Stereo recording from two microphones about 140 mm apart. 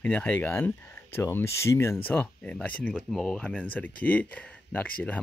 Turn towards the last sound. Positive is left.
turn(degrees=10)  # may be behind; listen again after turning